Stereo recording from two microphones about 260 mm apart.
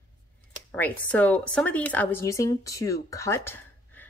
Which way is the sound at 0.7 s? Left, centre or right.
Centre.